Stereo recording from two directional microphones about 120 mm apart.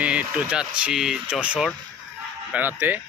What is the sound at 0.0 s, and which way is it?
Speech, 10° right (ahead or behind).